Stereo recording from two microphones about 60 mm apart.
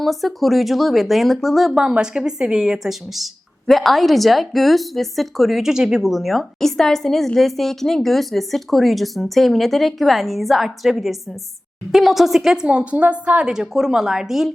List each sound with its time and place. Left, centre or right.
0.0 s a woman's voice: centre
1.8 s a woman's voice: centre
3.7 s a woman's voice: centre
12.6 s a woman's voice: right
13.5 s a woman's voice: centre